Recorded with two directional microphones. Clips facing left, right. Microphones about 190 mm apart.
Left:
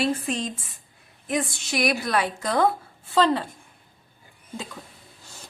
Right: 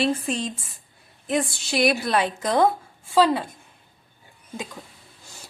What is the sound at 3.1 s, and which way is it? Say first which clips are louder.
Speech: right 2 dB; 10° right (ahead or behind).